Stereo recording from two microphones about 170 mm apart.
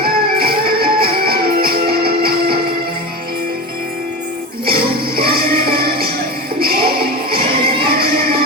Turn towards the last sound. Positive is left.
turn(degrees=-60)  # may be behind; listen again after turning